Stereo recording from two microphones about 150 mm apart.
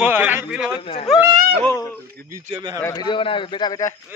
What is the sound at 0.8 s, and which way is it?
Speech, 40° left (ahead or behind).